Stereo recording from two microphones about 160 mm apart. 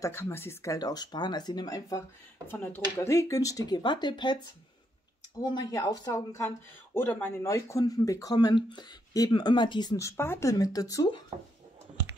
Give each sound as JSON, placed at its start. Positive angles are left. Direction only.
{"t": 0.0, "sound": "speech", "side_deg": 15}
{"t": 2.4, "sound": "speech", "side_deg": 10}
{"t": 5.4, "sound": "speech", "side_deg": 25}